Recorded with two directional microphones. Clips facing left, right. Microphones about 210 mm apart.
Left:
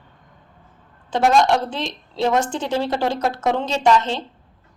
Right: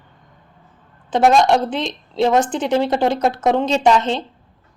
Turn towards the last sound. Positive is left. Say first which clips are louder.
# right 2 dB
turn(degrees=-20)  # may be behind; listen again after turning